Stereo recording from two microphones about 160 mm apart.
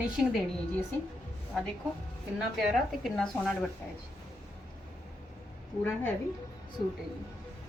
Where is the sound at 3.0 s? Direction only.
Centre (ahead or behind).